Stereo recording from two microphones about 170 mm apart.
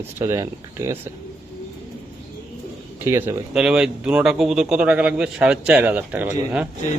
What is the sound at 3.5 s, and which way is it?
Speech, 5° right (ahead or behind).